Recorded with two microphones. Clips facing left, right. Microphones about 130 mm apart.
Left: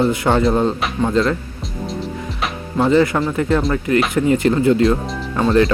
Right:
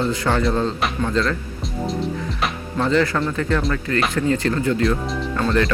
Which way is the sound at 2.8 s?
20° left (ahead or behind).